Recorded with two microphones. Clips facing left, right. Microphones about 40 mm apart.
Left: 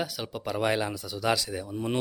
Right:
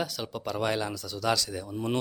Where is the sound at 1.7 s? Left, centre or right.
Centre.